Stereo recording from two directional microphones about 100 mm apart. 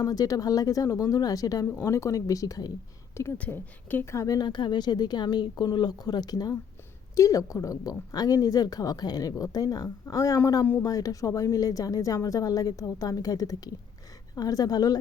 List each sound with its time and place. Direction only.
0.0 s speech: 35° left (ahead or behind)
3.3 s speech: 15° left (ahead or behind)
4.4 s speech: 50° left (ahead or behind)